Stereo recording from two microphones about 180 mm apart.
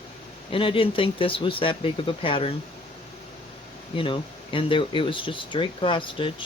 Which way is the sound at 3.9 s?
30° left (ahead or behind).